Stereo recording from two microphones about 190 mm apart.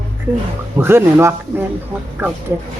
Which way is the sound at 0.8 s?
10° right (ahead or behind).